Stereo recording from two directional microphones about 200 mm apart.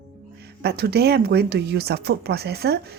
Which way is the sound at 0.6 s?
55° right (ahead or behind).